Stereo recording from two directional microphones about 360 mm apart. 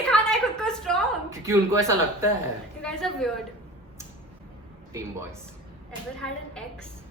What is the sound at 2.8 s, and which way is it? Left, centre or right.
Speech, centre.